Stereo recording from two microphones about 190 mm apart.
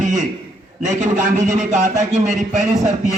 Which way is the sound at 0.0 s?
40° right (ahead or behind).